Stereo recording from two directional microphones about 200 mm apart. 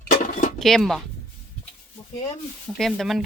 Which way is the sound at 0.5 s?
Centre (ahead or behind).